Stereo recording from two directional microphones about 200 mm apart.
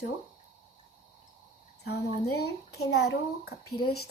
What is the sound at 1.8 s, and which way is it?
A child's voice, 55° left (ahead or behind).